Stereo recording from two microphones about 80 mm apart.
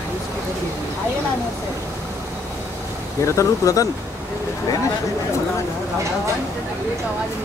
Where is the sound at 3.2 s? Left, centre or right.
Left.